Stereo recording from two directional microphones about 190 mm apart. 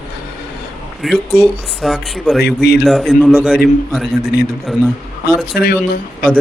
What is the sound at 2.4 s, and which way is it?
Speech, 60° left (ahead or behind).